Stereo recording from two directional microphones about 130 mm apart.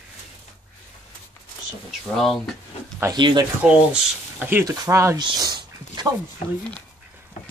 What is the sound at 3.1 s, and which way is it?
Speech, 35° right (ahead or behind).